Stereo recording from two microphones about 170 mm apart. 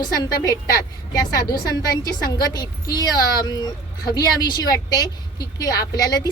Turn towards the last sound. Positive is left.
turn(degrees=20)  # may be behind; listen again after turning